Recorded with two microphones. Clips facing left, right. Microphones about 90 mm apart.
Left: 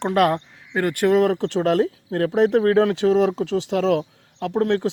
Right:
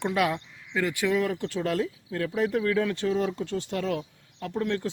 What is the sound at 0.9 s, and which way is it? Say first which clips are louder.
Speech: left 9 dB; 60° left (ahead or behind).